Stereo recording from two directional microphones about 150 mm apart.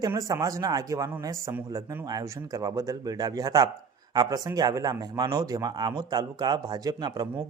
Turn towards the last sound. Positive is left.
turn(degrees=-25)  # may be behind; listen again after turning